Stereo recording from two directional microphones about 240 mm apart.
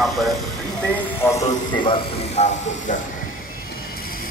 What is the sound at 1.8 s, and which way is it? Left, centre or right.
Speech, left.